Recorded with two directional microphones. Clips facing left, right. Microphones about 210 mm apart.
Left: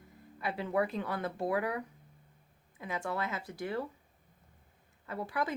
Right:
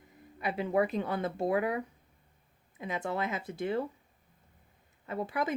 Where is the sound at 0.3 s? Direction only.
20° right (ahead or behind).